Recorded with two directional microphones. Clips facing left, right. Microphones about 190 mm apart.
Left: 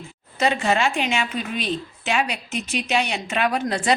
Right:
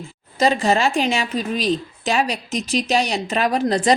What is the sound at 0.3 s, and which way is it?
A woman's voice, 35° right (ahead or behind).